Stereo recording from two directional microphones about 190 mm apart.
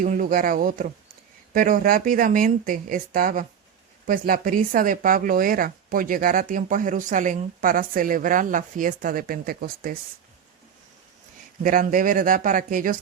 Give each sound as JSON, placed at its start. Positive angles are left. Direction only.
{"t": 0.0, "sound": "speech", "side_deg": -45}
{"t": 11.6, "sound": "speech", "side_deg": -45}